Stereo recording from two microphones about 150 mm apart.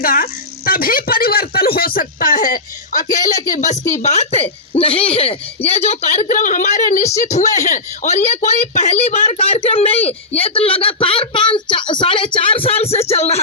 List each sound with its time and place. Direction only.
0.0 s speech: 70° left (ahead or behind)
4.0 s a woman's voice: 45° left (ahead or behind)